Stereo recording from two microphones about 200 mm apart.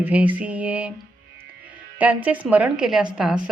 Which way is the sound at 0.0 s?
5° right (ahead or behind).